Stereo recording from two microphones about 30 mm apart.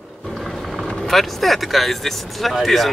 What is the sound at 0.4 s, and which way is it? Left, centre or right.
Music, centre.